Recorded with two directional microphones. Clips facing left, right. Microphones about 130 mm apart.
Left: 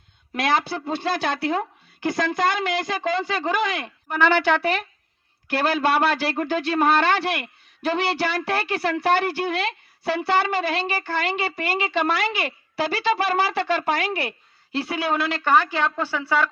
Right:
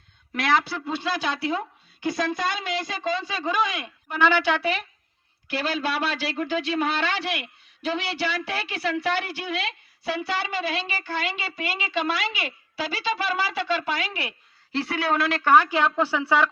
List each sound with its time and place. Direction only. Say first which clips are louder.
0.3 s a woman's voice: left 1 dB; 25° left (ahead or behind)
0.9 s a man's voice: left 3 dB; 55° left (ahead or behind)
15.0 s speech: right 1 dB; centre (ahead or behind)
16.0 s a woman's voice: right 1 dB; 15° right (ahead or behind)